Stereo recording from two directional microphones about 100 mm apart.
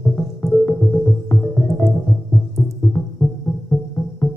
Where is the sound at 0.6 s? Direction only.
20° left (ahead or behind).